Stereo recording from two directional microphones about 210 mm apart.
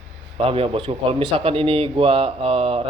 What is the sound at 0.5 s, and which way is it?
A man's voice, 25° right (ahead or behind).